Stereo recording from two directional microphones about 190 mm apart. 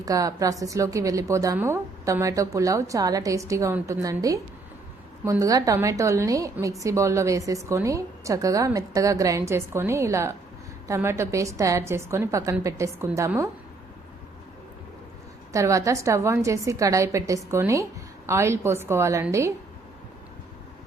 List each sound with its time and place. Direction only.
0.0 s a woman's voice: 20° right (ahead or behind)
15.5 s a woman's voice: 15° right (ahead or behind)